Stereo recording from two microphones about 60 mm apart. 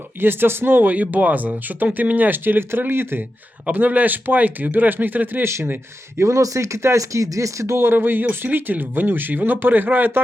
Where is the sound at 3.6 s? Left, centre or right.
Right.